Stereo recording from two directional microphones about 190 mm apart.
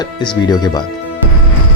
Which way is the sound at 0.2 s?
20° left (ahead or behind).